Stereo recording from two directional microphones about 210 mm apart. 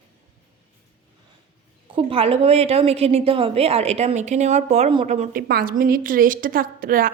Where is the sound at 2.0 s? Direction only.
25° right (ahead or behind).